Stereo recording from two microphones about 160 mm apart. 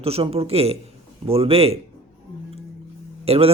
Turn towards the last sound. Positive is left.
turn(degrees=-40)  # may be behind; listen again after turning